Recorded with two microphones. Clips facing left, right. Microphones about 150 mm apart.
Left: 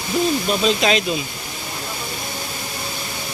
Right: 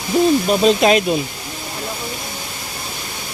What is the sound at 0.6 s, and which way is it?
Speech, 50° right (ahead or behind).